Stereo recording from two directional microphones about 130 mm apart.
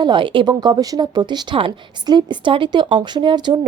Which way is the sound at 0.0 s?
40° right (ahead or behind).